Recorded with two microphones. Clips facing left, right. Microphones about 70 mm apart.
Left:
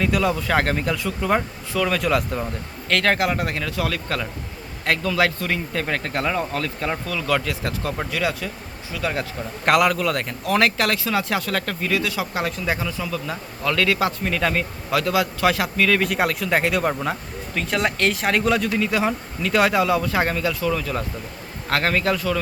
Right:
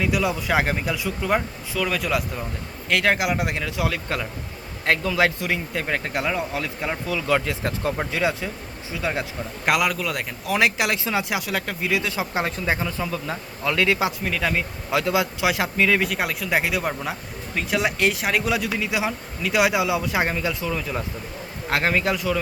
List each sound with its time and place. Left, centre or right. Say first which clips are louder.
0.0 s speech: left 2 dB; centre
2.9 s speech: left 1 dB; centre
9.6 s speech: left 4 dB; centre
14.3 s speech: left 2 dB; centre
14.8 s speech: left 1 dB; right
16.0 s speech: left 3 dB; centre